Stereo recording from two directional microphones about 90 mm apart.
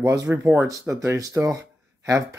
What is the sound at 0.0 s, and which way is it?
Speech, 35° right (ahead or behind).